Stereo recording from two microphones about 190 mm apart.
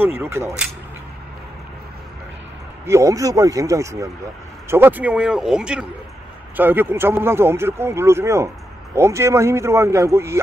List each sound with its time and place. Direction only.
0.0 s speech: 10° right (ahead or behind)
2.9 s speech: 15° right (ahead or behind)